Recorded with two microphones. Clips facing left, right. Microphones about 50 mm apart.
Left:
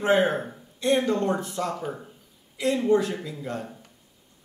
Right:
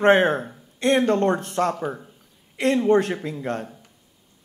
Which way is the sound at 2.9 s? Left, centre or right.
Right.